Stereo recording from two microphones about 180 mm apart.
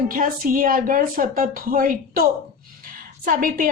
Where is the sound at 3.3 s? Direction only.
50° right (ahead or behind).